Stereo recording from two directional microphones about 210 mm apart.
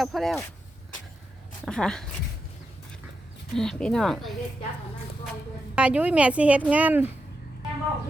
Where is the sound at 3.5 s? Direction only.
Centre (ahead or behind).